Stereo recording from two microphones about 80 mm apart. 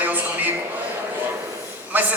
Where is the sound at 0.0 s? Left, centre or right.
Right.